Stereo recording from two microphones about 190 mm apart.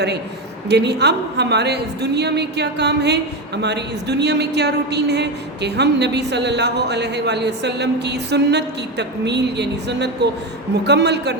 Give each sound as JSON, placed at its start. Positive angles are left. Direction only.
{"t": 0.7, "sound": "a woman's voice", "side_deg": -60}